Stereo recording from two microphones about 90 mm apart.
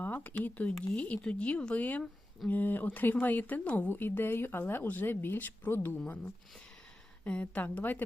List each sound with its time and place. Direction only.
0.0 s speech: 20° left (ahead or behind)
7.3 s speech: 15° left (ahead or behind)